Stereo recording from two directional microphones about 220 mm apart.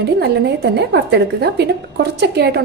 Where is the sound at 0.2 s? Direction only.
50° right (ahead or behind).